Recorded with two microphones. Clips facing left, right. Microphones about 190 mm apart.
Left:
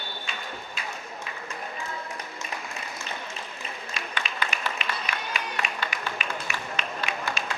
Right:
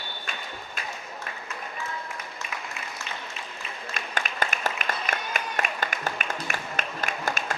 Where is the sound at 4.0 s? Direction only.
45° right (ahead or behind).